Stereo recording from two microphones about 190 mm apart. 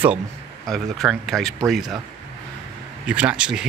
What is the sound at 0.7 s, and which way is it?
Speech, centre (ahead or behind).